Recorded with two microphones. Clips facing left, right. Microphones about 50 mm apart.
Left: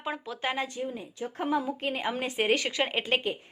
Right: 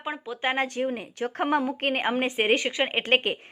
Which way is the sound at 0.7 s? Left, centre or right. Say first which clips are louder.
Right 6 dB; right.